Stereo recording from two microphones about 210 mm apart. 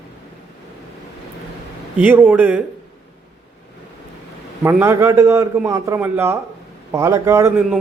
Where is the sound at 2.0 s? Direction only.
10° right (ahead or behind).